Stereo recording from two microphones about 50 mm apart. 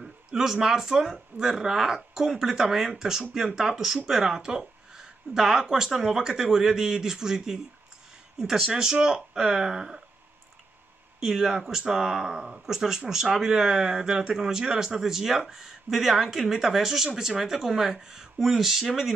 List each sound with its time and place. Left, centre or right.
0.0 s speech: centre
11.1 s speech: centre